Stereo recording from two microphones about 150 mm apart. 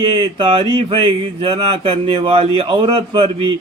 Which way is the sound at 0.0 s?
35° right (ahead or behind).